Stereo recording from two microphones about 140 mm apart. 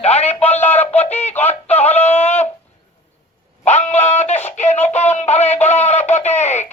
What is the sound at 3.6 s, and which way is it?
Music, 55° left (ahead or behind).